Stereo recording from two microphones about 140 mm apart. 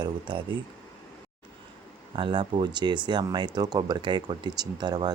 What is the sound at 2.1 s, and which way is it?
Speech, 35° right (ahead or behind).